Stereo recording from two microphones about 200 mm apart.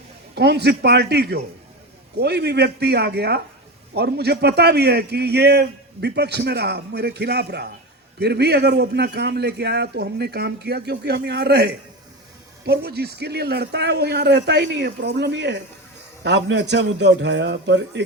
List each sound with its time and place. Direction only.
0.3 s a man's voice: 55° right (ahead or behind)